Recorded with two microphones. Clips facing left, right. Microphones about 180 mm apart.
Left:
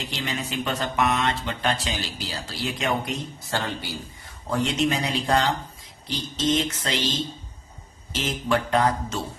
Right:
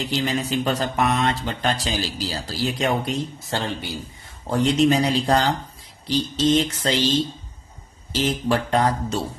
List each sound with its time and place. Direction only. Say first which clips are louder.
0.0 s speech: right 7 dB; 35° right (ahead or behind)
4.4 s speech: right 5 dB; 35° right (ahead or behind)